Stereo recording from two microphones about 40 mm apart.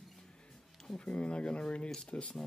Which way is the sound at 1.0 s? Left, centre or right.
Left.